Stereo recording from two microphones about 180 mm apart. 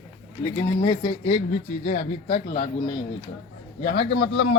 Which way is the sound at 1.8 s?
45° left (ahead or behind).